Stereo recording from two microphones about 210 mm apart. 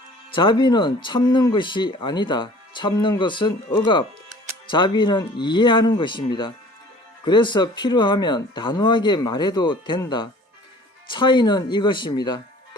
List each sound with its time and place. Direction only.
0.3 s speech: 25° left (ahead or behind)